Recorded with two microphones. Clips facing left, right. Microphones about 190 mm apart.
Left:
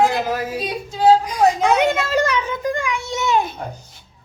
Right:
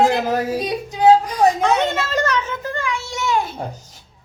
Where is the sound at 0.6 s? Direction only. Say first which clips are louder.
Right 2 dB; 20° right (ahead or behind).